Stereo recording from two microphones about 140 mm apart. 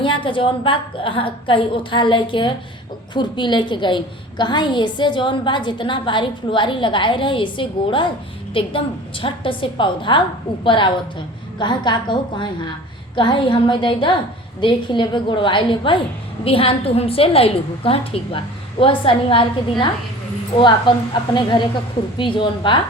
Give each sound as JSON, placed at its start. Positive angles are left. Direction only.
{"t": 0.0, "sound": "a woman's voice", "side_deg": 35}
{"t": 20.6, "sound": "a woman's voice", "side_deg": 35}